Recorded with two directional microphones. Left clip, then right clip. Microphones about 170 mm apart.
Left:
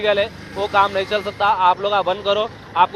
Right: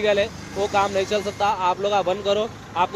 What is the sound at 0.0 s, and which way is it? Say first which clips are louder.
Speech: left 2 dB; 40° right (ahead or behind).